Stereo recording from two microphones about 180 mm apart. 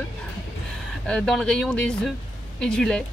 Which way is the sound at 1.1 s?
5° left (ahead or behind).